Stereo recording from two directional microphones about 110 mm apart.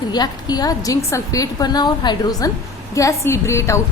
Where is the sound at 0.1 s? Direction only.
40° left (ahead or behind).